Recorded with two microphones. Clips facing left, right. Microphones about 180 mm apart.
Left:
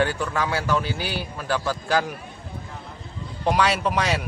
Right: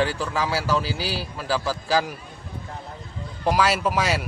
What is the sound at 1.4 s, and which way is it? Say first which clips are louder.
Speech: even; 5° right (ahead or behind).